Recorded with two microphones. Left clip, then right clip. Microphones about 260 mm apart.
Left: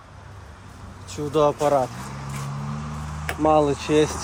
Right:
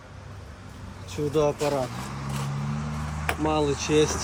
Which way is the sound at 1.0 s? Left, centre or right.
Left.